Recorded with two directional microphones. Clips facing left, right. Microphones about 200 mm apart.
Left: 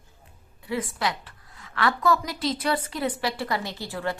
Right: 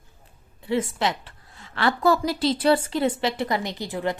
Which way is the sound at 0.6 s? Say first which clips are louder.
Right 4 dB; 25° right (ahead or behind).